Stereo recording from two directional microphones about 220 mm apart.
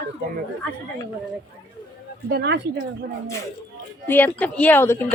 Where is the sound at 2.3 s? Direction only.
50° right (ahead or behind).